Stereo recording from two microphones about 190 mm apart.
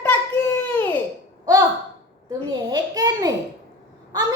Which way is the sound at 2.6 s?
20° right (ahead or behind).